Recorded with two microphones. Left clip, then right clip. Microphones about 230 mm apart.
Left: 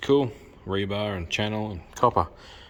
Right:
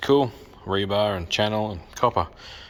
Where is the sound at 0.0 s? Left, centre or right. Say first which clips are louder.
Right 2 dB; centre.